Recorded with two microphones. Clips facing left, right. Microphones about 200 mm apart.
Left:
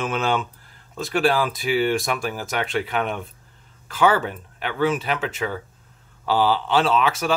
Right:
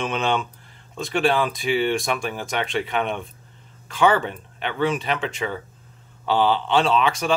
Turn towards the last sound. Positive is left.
turn(degrees=5)  # may be behind; listen again after turning